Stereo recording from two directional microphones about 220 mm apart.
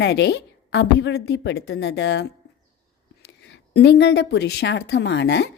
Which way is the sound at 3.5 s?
50° left (ahead or behind).